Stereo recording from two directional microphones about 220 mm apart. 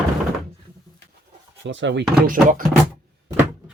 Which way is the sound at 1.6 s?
55° right (ahead or behind).